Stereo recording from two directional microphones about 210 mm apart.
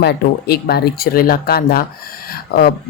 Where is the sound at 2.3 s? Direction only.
45° left (ahead or behind).